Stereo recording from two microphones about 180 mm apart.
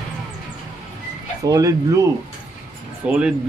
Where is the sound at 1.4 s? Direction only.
20° right (ahead or behind).